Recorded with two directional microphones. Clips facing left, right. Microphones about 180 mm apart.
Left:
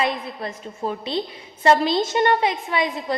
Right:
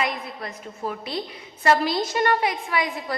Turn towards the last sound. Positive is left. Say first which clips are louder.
# left 3 dB
turn(degrees=25)  # may be behind; listen again after turning